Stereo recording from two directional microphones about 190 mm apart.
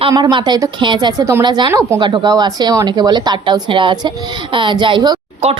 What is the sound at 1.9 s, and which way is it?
A woman's voice, 25° right (ahead or behind).